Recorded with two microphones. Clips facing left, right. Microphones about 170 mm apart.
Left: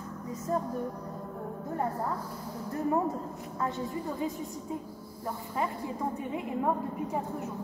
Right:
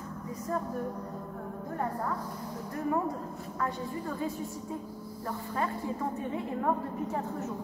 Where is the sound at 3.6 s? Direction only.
20° left (ahead or behind).